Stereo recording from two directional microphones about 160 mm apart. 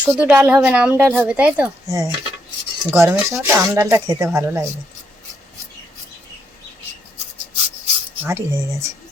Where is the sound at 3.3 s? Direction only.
20° right (ahead or behind).